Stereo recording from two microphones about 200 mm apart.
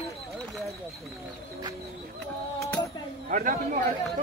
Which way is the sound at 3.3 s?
40° right (ahead or behind).